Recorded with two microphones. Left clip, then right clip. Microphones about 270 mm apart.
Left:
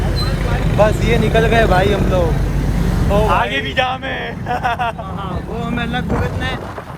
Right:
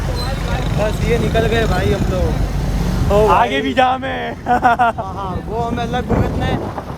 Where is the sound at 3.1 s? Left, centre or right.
Right.